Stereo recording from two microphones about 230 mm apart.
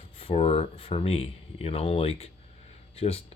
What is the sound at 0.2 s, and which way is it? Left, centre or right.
Speech, left.